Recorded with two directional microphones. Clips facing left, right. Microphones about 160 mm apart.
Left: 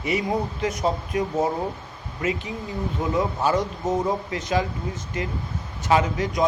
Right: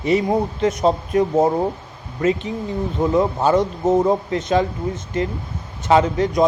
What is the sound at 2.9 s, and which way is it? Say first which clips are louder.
Speech: right 7 dB; 25° right (ahead or behind).